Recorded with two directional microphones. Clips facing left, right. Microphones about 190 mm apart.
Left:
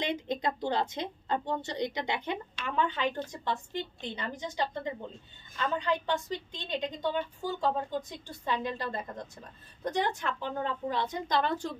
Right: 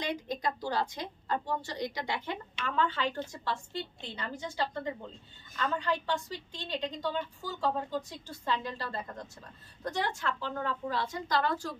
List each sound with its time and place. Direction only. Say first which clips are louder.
0.0 s a woman's voice: left 2 dB; 20° left (ahead or behind)
5.8 s a woman's voice: left 2 dB; 20° left (ahead or behind)